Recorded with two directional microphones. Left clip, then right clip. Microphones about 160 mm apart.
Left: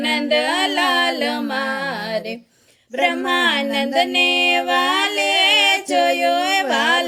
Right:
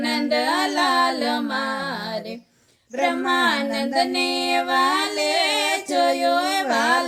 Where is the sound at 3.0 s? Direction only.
35° left (ahead or behind).